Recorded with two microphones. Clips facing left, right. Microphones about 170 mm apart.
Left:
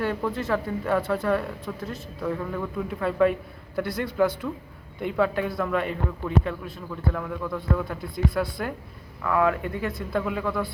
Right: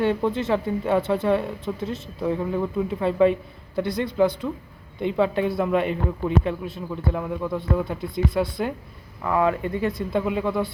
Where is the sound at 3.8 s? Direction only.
5° left (ahead or behind).